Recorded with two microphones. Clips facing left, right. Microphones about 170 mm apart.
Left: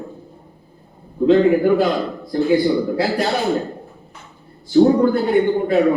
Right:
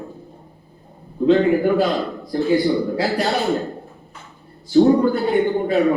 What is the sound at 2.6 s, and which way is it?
Speech, 20° left (ahead or behind).